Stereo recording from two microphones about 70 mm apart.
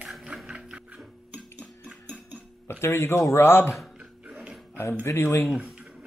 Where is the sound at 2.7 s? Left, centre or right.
Left.